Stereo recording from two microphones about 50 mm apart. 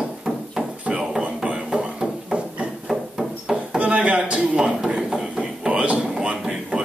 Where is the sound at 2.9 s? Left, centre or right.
Centre.